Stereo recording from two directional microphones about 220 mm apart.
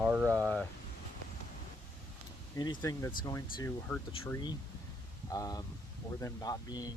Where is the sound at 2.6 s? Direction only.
15° left (ahead or behind).